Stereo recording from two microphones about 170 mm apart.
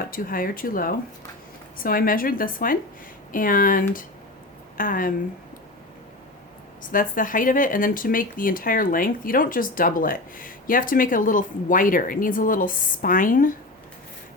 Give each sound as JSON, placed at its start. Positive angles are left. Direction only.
{"t": 0.1, "sound": "speech", "side_deg": 55}
{"t": 6.9, "sound": "speech", "side_deg": 55}